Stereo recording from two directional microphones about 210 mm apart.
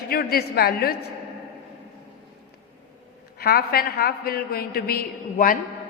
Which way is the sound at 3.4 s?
45° left (ahead or behind).